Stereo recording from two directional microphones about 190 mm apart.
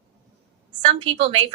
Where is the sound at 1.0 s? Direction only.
30° right (ahead or behind).